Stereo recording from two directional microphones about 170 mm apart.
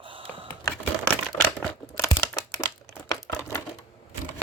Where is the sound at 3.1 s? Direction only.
20° left (ahead or behind).